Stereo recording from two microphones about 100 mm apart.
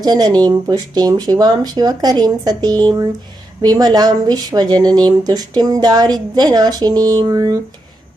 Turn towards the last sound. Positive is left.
turn(degrees=-40)  # may be behind; listen again after turning